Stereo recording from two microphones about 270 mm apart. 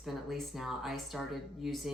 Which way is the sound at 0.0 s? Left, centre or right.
Centre.